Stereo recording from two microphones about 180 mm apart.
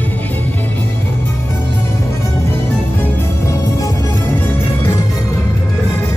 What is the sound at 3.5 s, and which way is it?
Music, 20° left (ahead or behind).